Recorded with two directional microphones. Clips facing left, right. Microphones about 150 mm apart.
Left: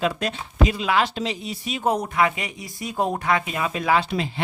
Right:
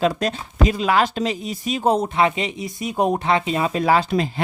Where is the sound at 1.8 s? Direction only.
25° right (ahead or behind).